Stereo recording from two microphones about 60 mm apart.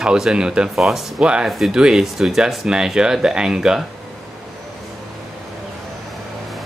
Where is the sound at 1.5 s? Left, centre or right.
Centre.